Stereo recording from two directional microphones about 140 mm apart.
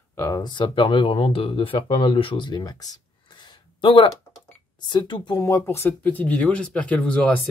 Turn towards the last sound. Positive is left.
turn(degrees=10)  # may be behind; listen again after turning